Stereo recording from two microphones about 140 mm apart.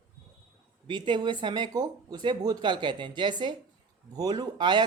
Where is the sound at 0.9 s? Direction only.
35° right (ahead or behind).